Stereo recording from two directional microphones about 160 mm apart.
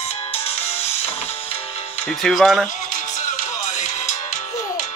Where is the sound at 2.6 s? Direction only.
55° left (ahead or behind).